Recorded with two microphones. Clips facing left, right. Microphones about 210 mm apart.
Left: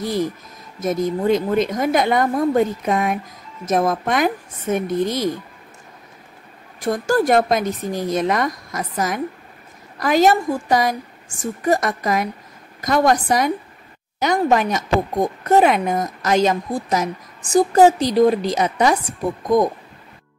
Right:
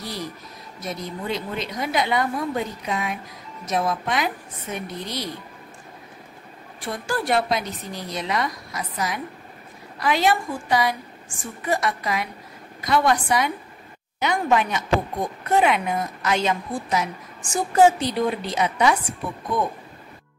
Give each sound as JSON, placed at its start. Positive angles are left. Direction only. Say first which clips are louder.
{"t": 0.0, "sound": "a woman's voice", "louder": "left 10 dB", "side_deg": 50}
{"t": 6.8, "sound": "a woman's voice", "louder": "left 9 dB", "side_deg": 45}